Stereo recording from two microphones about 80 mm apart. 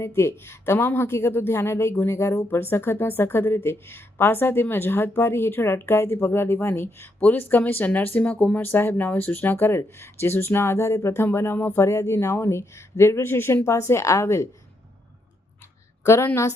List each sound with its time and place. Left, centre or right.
0.0 s speech: left
16.0 s speech: left